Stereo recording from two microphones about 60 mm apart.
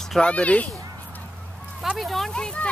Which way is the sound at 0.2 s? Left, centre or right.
Left.